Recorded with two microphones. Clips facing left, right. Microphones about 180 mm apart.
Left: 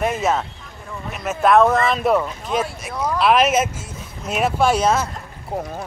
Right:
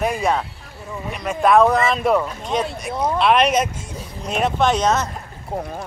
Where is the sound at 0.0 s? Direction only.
5° left (ahead or behind).